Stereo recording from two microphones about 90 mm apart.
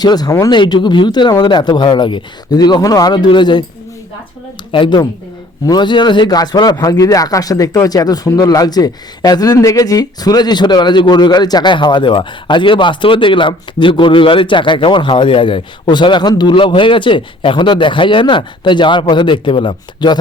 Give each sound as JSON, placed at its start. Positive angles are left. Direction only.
{"t": 0.0, "sound": "speech", "side_deg": 50}
{"t": 0.5, "sound": "speech", "side_deg": 60}
{"t": 3.2, "sound": "speech", "side_deg": 60}
{"t": 4.7, "sound": "speech", "side_deg": 70}
{"t": 5.6, "sound": "speech", "side_deg": 55}
{"t": 16.6, "sound": "speech", "side_deg": 70}